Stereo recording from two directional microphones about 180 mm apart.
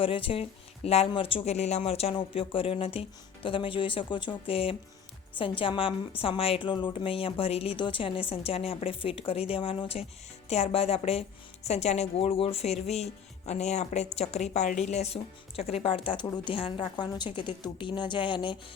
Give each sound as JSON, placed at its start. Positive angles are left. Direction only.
{"t": 0.0, "sound": "a woman's voice", "side_deg": 30}